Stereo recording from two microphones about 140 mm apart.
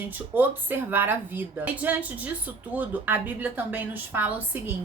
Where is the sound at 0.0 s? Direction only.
15° right (ahead or behind).